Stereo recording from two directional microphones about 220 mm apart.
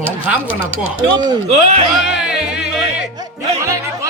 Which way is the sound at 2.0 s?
5° right (ahead or behind).